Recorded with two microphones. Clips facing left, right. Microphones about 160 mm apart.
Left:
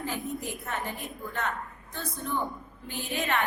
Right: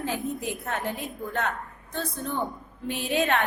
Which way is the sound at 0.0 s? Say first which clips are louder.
Right 4 dB; 80° right.